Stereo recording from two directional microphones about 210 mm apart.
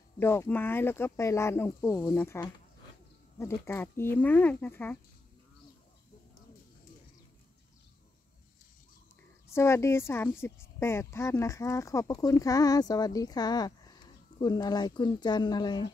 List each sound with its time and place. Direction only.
0.2 s a woman's voice: 10° left (ahead or behind)
9.5 s a woman's voice: 15° left (ahead or behind)